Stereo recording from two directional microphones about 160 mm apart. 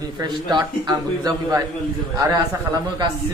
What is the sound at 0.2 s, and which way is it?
Speech, 25° right (ahead or behind).